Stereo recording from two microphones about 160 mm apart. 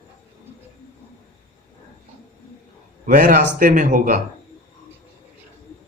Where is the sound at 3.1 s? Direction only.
55° right (ahead or behind).